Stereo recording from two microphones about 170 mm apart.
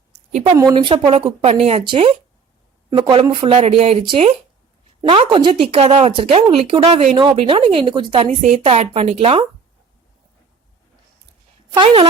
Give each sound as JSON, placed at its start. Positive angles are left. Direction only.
{"t": 0.5, "sound": "speech", "side_deg": -20}
{"t": 0.8, "sound": "speech", "side_deg": -30}
{"t": 11.7, "sound": "speech", "side_deg": -30}